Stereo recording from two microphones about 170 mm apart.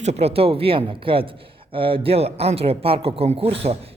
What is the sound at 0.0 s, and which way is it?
A man's voice, 40° right (ahead or behind).